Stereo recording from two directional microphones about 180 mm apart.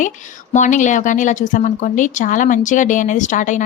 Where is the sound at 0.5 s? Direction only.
45° left (ahead or behind).